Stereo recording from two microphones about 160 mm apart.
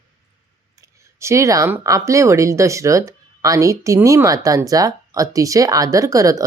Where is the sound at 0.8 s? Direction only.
20° right (ahead or behind).